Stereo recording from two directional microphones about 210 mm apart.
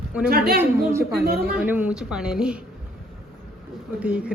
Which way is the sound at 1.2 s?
50° right (ahead or behind).